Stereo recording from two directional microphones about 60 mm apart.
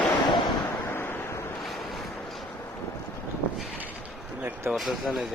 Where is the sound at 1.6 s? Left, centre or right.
Centre.